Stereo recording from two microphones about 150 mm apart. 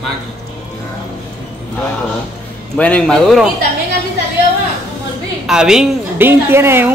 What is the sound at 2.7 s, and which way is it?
Speech, 10° left (ahead or behind).